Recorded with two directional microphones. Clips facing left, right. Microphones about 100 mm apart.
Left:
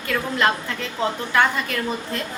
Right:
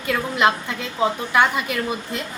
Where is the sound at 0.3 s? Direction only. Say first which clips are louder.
Right 2 dB; 15° right (ahead or behind).